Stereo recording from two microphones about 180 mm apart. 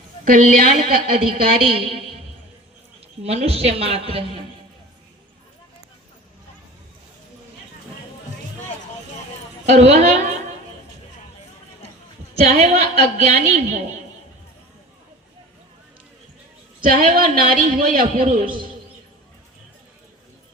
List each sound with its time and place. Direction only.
0.3 s a man's voice: 45° right (ahead or behind)
1.5 s a woman's voice: 30° right (ahead or behind)
3.2 s a woman's voice: 35° right (ahead or behind)
9.7 s a woman's voice: 40° right (ahead or behind)
12.5 s a woman's voice: 40° right (ahead or behind)
16.8 s a man's voice: 50° right (ahead or behind)